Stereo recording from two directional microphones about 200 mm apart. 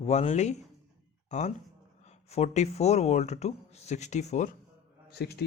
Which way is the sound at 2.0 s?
35° left (ahead or behind).